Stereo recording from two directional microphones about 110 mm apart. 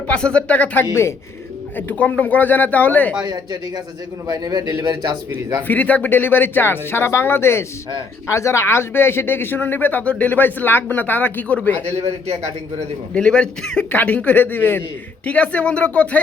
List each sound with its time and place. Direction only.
0.1 s speech: 10° left (ahead or behind)
3.2 s a man's voice: 40° right (ahead or behind)
5.6 s speech: 15° left (ahead or behind)
11.9 s a man's voice: 75° right (ahead or behind)
13.1 s speech: 10° left (ahead or behind)